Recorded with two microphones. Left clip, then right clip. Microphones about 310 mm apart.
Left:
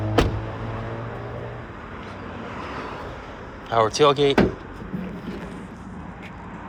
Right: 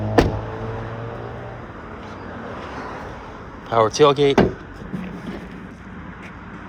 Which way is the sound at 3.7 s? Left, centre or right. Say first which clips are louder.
Right 3 dB; centre.